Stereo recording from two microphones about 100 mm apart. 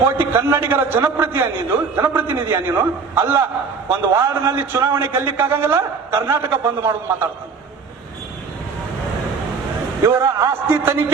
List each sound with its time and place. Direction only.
0.0 s a man's voice: 25° right (ahead or behind)
10.0 s a man's voice: 25° right (ahead or behind)